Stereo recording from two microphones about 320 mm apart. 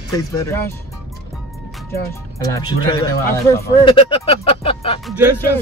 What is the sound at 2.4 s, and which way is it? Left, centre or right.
Speech, centre.